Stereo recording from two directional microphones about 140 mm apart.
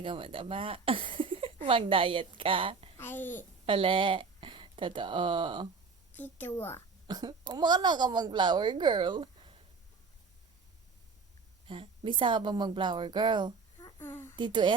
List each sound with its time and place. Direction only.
0.0 s a woman's voice: 40° right (ahead or behind)
3.0 s a woman's voice: 15° left (ahead or behind)
3.7 s speech: 35° right (ahead or behind)
6.1 s a woman's voice: 15° left (ahead or behind)
7.1 s a woman's voice: 30° right (ahead or behind)
11.6 s a woman's voice: 40° right (ahead or behind)
14.0 s a woman's voice: 15° left (ahead or behind)
14.3 s a woman's voice: 35° right (ahead or behind)